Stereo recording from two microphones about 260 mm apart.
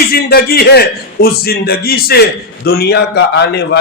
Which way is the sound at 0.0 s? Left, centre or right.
Left.